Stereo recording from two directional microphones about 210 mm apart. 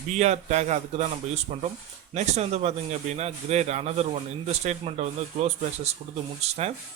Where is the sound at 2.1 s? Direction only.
30° right (ahead or behind).